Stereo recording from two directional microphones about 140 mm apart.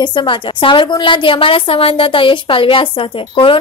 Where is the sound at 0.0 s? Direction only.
35° left (ahead or behind).